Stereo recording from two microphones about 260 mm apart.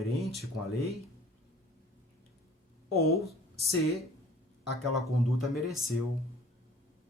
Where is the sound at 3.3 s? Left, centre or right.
Centre.